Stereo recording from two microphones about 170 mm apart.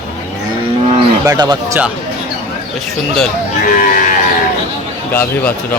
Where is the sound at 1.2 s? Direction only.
20° right (ahead or behind).